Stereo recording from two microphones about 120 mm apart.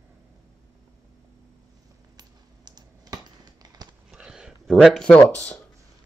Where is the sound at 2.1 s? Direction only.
35° right (ahead or behind).